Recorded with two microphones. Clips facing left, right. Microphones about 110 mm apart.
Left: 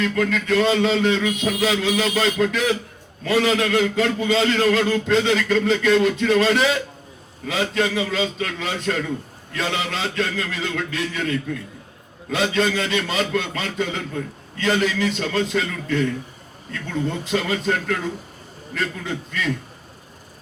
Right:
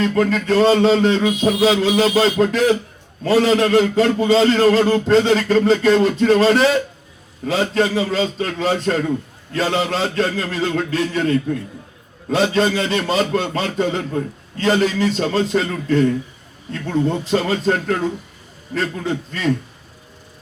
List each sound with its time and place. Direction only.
0.0 s a man's voice: 35° right (ahead or behind)